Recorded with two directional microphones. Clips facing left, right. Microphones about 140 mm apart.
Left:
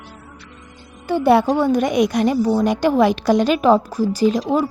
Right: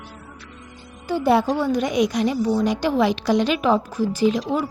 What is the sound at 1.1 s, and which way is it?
A woman's voice, 60° left (ahead or behind).